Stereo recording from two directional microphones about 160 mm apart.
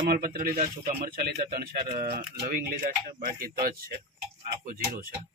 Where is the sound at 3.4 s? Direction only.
70° right (ahead or behind).